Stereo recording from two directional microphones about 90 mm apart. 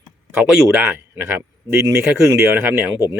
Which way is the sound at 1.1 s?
30° right (ahead or behind).